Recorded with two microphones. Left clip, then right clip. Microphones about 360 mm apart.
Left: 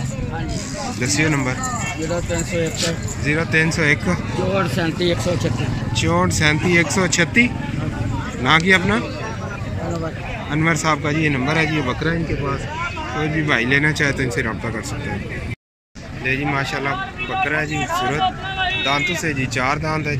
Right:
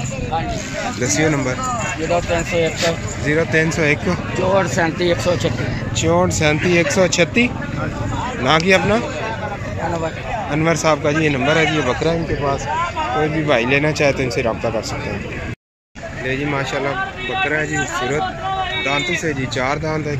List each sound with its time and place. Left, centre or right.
1.0 s speech: centre
2.8 s speech: centre
4.6 s speech: centre
5.9 s speech: centre
10.5 s speech: centre
13.5 s speech: centre
16.3 s speech: centre
18.9 s speech: centre